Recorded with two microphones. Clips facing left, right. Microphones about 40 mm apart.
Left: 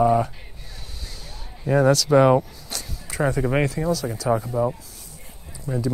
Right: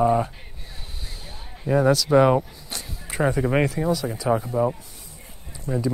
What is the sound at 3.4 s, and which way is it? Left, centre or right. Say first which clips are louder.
Speech: even; centre.